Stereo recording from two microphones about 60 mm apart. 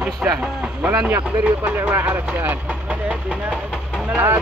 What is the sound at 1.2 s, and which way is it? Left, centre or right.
Speech, right.